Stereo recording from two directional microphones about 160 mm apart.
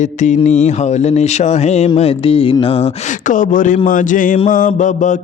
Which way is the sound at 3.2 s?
55° left (ahead or behind).